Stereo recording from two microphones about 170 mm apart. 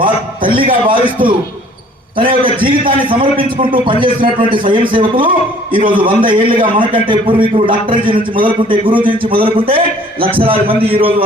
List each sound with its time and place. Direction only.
0.0 s a man's voice: 30° right (ahead or behind)